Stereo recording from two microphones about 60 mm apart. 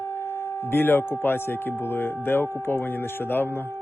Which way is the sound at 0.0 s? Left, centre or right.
Left.